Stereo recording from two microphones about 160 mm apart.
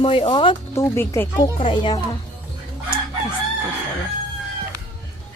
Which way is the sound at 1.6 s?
30° left (ahead or behind).